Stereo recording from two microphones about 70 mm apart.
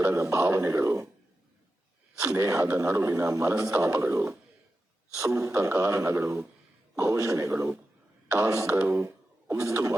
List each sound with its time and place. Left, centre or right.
0.0 s speech: right
2.3 s a man's voice: right
7.5 s a man's voice: right
8.9 s a sound: right